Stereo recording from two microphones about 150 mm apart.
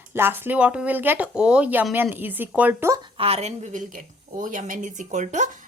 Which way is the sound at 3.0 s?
40° right (ahead or behind).